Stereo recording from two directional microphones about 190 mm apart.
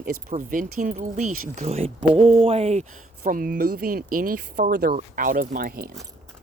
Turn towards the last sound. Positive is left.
turn(degrees=-50)  # may be behind; listen again after turning